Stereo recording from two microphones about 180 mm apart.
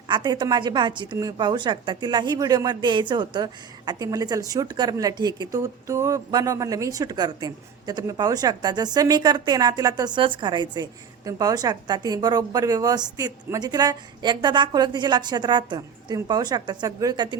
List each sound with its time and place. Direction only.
0.1 s a woman's voice: 25° right (ahead or behind)